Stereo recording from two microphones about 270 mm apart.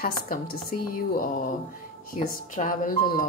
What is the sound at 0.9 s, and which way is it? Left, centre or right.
Speech, left.